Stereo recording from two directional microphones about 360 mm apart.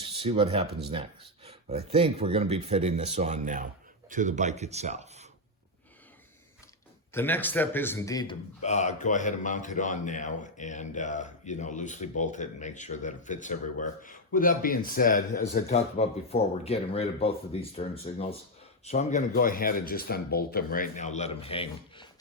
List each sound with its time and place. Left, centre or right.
0.0 s speech: centre
7.1 s a man's voice: centre